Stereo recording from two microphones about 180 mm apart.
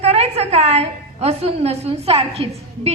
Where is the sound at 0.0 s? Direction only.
35° right (ahead or behind).